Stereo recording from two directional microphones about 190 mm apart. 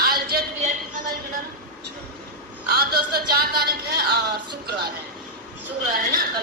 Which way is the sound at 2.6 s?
55° right (ahead or behind).